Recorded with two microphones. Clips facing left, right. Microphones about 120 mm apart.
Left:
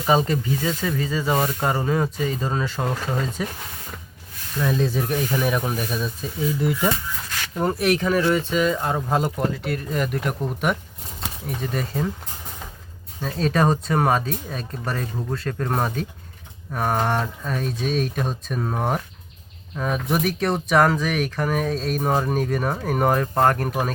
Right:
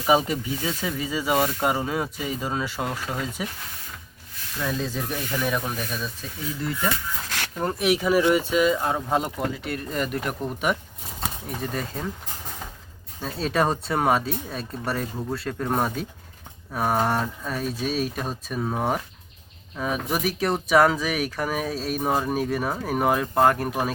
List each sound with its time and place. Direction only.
0.0 s speech: 10° right (ahead or behind); by 6.9 s 10° left (ahead or behind)
7.3 s a sound: 70° right (ahead or behind)
7.6 s speech: centre (ahead or behind)
13.2 s speech: centre (ahead or behind)